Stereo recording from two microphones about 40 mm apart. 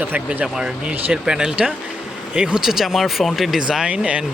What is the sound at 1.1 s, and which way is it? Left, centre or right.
Speech, right.